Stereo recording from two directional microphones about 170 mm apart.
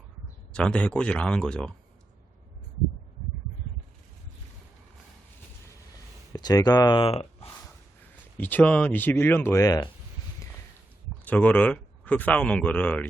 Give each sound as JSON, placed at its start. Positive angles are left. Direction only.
{"t": 0.5, "sound": "speech", "side_deg": 5}
{"t": 6.3, "sound": "speech", "side_deg": 25}
{"t": 8.4, "sound": "speech", "side_deg": 10}
{"t": 11.3, "sound": "speech", "side_deg": 10}